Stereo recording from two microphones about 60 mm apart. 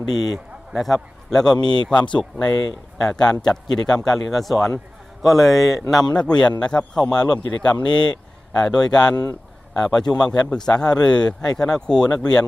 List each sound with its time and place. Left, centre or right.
0.1 s a man's voice: centre
6.1 s a man's voice: centre